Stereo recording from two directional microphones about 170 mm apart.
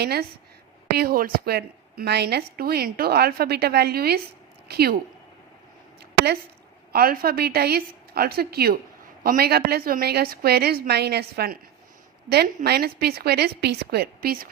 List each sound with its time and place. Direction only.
0.0 s a woman's voice: 70° right (ahead or behind)
6.0 s a sound: 70° right (ahead or behind)
6.9 s a woman's voice: 60° right (ahead or behind)
12.6 s a woman's voice: 70° right (ahead or behind)